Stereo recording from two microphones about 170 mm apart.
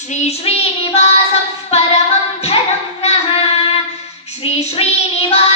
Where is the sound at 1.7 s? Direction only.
40° left (ahead or behind).